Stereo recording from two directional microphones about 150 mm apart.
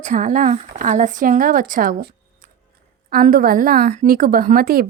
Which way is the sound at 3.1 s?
70° right (ahead or behind).